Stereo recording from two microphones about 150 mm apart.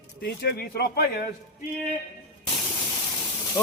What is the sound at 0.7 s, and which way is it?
Speech, 90° left.